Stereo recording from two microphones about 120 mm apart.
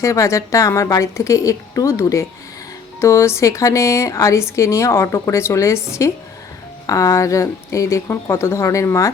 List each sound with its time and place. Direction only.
0.0 s a woman's voice: 25° left (ahead or behind)
6.8 s a woman's voice: 25° left (ahead or behind)